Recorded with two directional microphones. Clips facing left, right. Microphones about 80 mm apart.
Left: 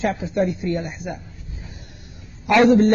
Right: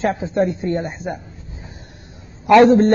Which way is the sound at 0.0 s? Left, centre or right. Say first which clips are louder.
Right 3 dB; right.